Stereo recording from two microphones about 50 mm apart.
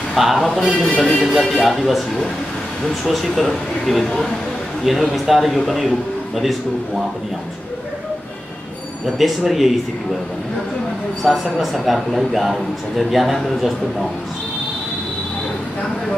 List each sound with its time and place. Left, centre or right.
0.1 s a man's voice: centre
0.7 s a man's voice: left
1.1 s speech: centre
3.1 s a man's voice: centre
9.0 s speech: centre
11.2 s speech: centre